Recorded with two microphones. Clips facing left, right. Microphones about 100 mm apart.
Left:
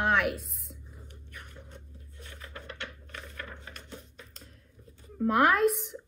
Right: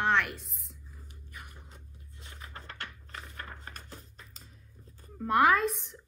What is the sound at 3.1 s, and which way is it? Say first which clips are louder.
Coin: left 1 dB; 30° right (ahead or behind).